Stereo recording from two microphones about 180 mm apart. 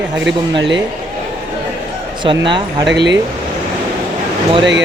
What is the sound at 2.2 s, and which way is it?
Speech, 25° right (ahead or behind).